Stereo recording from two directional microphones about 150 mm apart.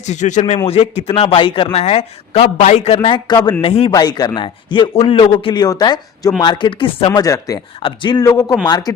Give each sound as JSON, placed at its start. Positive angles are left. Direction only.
{"t": 0.0, "sound": "a man's voice", "side_deg": 50}
{"t": 0.7, "sound": "speech", "side_deg": 40}
{"t": 7.2, "sound": "speech", "side_deg": 20}
{"t": 7.8, "sound": "speech", "side_deg": 35}